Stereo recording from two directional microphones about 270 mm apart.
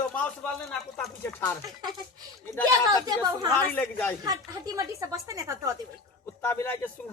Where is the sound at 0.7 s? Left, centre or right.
Centre.